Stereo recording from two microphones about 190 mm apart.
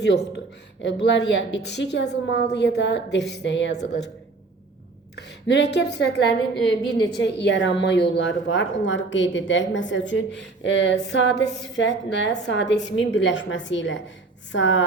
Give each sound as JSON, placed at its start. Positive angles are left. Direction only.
{"t": 0.0, "sound": "a sound", "side_deg": 60}
{"t": 1.0, "sound": "a woman's voice", "side_deg": 65}
{"t": 5.1, "sound": "a woman's voice", "side_deg": 60}